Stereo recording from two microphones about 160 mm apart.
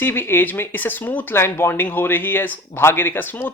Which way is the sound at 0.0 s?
15° left (ahead or behind).